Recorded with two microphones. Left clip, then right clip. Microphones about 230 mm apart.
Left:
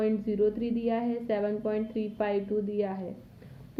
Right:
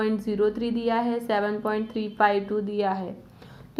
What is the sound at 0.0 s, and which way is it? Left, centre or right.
A woman's voice, centre.